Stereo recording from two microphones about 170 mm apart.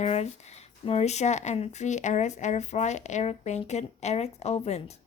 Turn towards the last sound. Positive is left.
turn(degrees=40)  # may be behind; listen again after turning